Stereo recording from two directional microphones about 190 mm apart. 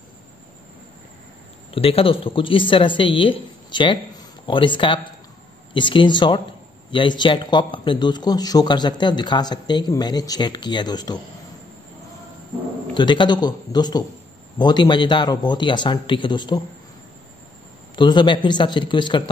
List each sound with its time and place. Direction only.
1.7 s a man's voice: 30° left (ahead or behind)
12.9 s a man's voice: 25° left (ahead or behind)
17.9 s a man's voice: 25° left (ahead or behind)